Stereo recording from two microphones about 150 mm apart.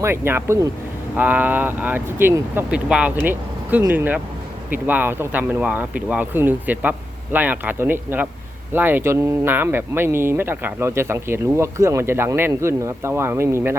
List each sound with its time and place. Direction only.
0.0 s speech: 15° right (ahead or behind)